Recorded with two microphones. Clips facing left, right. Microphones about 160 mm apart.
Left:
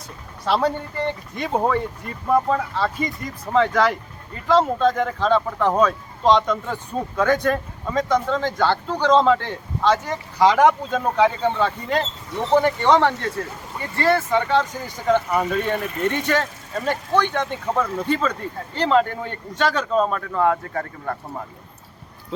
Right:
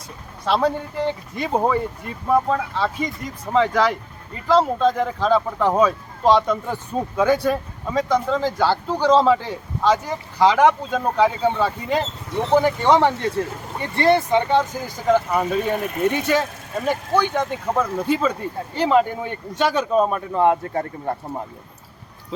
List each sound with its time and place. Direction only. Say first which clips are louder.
0.4 s speech: right 1 dB; centre (ahead or behind); by 21.4 s 25° right (ahead or behind)